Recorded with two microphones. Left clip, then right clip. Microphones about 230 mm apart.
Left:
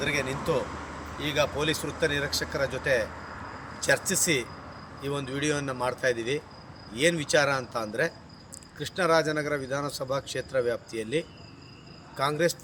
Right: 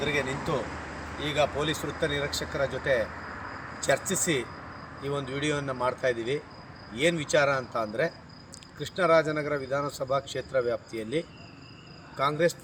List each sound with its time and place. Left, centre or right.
0.0 s a man's voice: centre
3.4 s a sound: left
3.8 s a man's voice: centre